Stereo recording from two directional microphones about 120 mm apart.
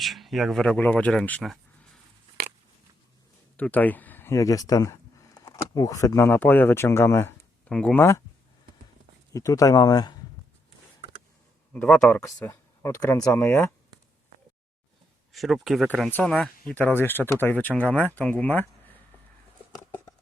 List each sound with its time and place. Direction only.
0.0 s speech: centre (ahead or behind)
3.6 s speech: 15° left (ahead or behind)
9.3 s speech: 30° left (ahead or behind)
11.7 s speech: 15° left (ahead or behind)
15.3 s speech: centre (ahead or behind)
16.0 s speech: 10° left (ahead or behind)